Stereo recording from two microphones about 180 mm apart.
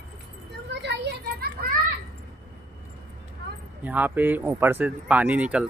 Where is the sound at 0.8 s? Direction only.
65° right (ahead or behind).